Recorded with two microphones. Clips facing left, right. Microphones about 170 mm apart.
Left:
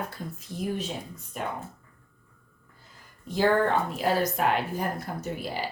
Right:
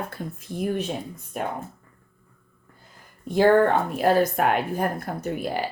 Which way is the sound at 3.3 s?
55° right (ahead or behind).